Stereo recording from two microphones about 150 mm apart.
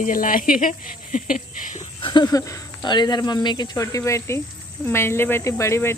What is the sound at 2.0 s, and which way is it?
Speech, 30° left (ahead or behind).